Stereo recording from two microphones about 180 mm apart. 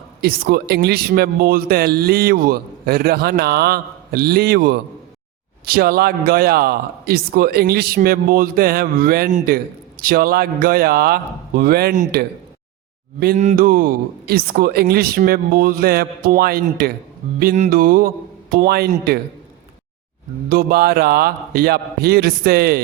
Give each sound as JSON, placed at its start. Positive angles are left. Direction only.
{"t": 0.2, "sound": "speech", "side_deg": -60}
{"t": 13.3, "sound": "speech", "side_deg": -40}
{"t": 17.5, "sound": "speech", "side_deg": -45}
{"t": 20.5, "sound": "speech", "side_deg": -55}